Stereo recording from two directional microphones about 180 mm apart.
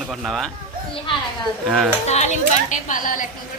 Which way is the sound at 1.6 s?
Centre (ahead or behind).